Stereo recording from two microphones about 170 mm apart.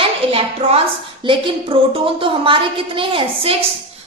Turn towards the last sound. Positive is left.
turn(degrees=-30)  # may be behind; listen again after turning